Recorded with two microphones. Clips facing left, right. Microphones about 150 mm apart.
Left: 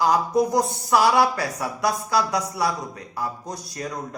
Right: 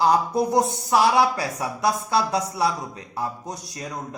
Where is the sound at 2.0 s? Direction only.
25° right (ahead or behind).